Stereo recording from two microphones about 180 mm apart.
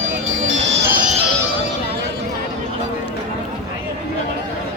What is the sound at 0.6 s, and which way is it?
Music, 75° right (ahead or behind).